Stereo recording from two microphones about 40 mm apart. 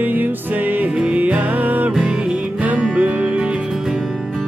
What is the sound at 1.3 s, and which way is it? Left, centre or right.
Music, right.